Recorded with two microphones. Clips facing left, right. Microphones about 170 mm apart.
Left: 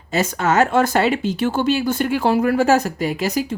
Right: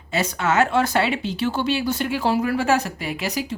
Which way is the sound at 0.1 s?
40° left (ahead or behind).